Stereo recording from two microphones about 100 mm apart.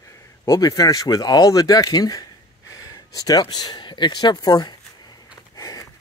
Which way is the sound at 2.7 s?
35° left (ahead or behind).